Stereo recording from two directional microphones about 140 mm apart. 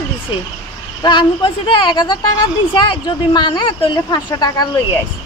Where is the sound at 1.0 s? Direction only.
35° left (ahead or behind).